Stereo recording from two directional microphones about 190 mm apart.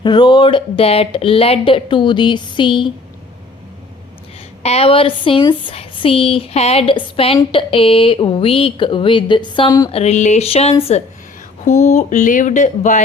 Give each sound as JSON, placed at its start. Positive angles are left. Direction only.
{"t": 0.0, "sound": "speech", "side_deg": 25}
{"t": 4.6, "sound": "speech", "side_deg": 30}
{"t": 9.9, "sound": "speech", "side_deg": 35}